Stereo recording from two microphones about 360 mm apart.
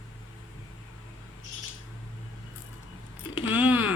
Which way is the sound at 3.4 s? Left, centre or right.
Centre.